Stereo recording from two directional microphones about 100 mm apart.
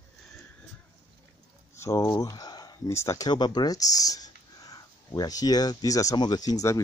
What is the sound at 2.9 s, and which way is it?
Speech, 30° left (ahead or behind).